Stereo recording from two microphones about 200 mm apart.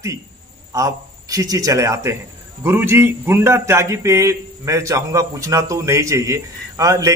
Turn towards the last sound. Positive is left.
turn(degrees=-15)  # may be behind; listen again after turning